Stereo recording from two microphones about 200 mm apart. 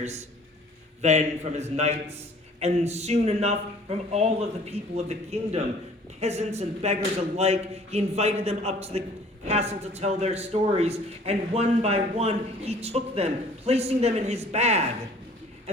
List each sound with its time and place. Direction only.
1.0 s a man's voice: 35° right (ahead or behind)